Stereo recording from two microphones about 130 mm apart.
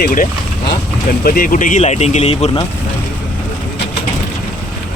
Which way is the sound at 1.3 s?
90° left.